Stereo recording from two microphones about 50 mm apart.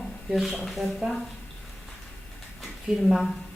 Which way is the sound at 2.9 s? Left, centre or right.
Centre.